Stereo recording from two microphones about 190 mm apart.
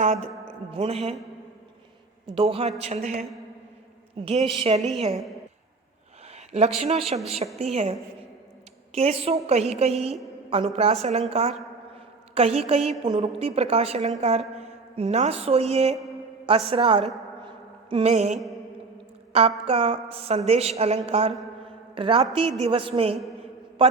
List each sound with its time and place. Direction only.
0.0 s speech: 35° right (ahead or behind)
2.3 s a woman's voice: 30° right (ahead or behind)
4.3 s a woman's voice: 30° right (ahead or behind)
6.5 s a woman's voice: 35° right (ahead or behind)
9.0 s a woman's voice: 35° right (ahead or behind)
14.2 s a sound: 35° right (ahead or behind)
16.5 s a woman's voice: 30° right (ahead or behind)
17.4 s a sound: 30° right (ahead or behind)
19.3 s a woman's voice: 30° right (ahead or behind)